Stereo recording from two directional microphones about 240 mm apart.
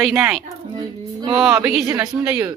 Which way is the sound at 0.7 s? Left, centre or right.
Centre.